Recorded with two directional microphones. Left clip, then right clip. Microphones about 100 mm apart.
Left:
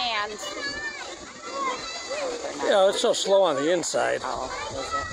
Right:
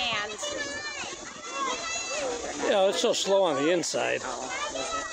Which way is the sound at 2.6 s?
20° right (ahead or behind).